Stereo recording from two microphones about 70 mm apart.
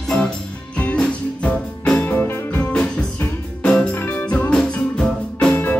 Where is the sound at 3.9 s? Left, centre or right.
Left.